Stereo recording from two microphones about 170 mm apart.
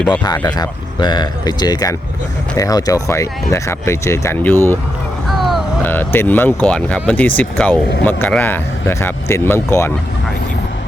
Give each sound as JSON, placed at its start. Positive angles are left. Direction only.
{"t": 0.4, "sound": "speech", "side_deg": 25}
{"t": 5.3, "sound": "music", "side_deg": 0}
{"t": 5.8, "sound": "speech", "side_deg": 10}